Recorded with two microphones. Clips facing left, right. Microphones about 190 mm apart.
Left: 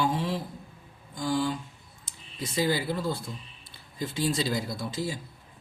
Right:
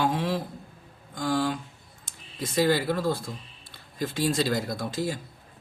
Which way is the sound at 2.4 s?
60° right (ahead or behind).